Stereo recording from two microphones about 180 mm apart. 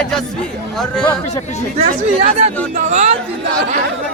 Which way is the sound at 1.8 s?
35° right (ahead or behind).